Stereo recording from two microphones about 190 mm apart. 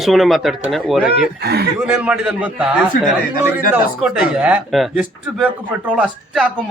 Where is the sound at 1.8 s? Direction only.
10° right (ahead or behind).